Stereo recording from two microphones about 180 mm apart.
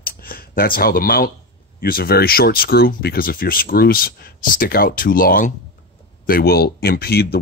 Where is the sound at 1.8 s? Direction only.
55° left (ahead or behind).